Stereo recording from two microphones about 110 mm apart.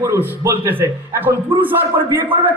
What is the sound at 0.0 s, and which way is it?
A man's voice, 25° right (ahead or behind).